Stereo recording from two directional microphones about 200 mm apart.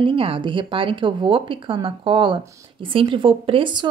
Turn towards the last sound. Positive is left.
turn(degrees=-25)  # may be behind; listen again after turning